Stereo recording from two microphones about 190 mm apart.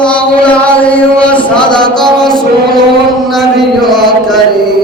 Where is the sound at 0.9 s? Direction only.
5° left (ahead or behind).